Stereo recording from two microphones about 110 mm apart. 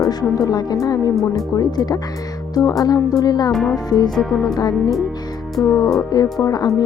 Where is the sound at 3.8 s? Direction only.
35° left (ahead or behind).